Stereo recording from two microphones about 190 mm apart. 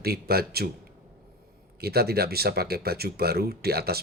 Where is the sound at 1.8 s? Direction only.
55° right (ahead or behind).